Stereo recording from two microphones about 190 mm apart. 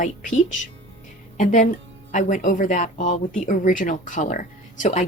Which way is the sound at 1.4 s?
40° left (ahead or behind).